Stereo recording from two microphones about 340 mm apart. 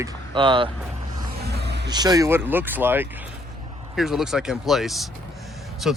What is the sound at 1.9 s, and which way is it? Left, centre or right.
Speech, centre.